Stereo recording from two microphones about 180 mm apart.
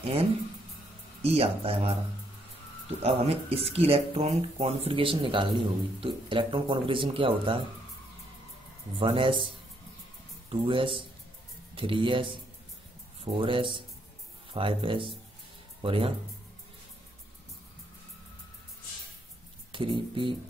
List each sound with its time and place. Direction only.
0.0 s speech: 35° right (ahead or behind)
3.0 s speech: 35° right (ahead or behind)
9.0 s speech: 30° right (ahead or behind)
10.5 s speech: 30° right (ahead or behind)
19.7 s speech: 30° right (ahead or behind)